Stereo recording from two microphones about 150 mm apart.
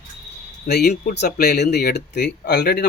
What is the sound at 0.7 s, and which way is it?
Speech, 90° left.